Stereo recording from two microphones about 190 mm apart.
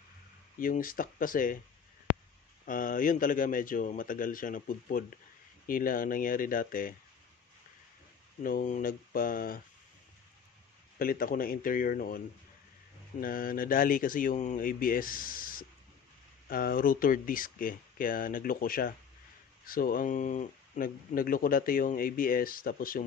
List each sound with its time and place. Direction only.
0.6 s speech: 45° left (ahead or behind)
2.6 s speech: 45° left (ahead or behind)
8.4 s speech: 45° left (ahead or behind)
11.0 s speech: 50° left (ahead or behind)
13.2 s speech: 50° left (ahead or behind)